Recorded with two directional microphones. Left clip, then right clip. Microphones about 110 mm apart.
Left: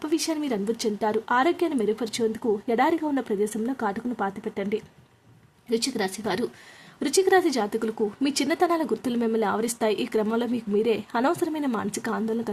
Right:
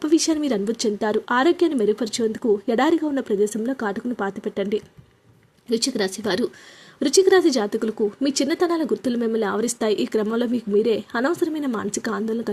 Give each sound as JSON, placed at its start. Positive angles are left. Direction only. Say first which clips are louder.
{"t": 0.0, "sound": "speech", "louder": "right 7 dB", "side_deg": -35}
{"t": 3.0, "sound": "a woman's voice", "louder": "right 4 dB", "side_deg": -20}